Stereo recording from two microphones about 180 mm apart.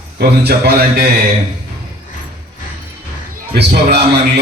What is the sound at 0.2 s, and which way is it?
Speech, 60° right (ahead or behind).